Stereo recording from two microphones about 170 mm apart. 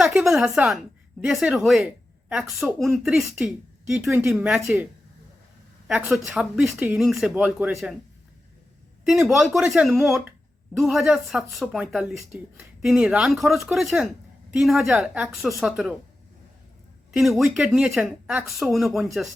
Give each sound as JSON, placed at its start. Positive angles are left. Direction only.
{"t": 0.0, "sound": "a woman's voice", "side_deg": 0}
{"t": 5.9, "sound": "a woman's voice", "side_deg": -5}
{"t": 9.2, "sound": "a woman's voice", "side_deg": 0}
{"t": 17.1, "sound": "a woman's voice", "side_deg": 0}